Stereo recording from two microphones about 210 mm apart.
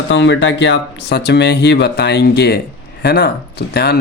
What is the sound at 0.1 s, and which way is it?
Speech, 60° left (ahead or behind).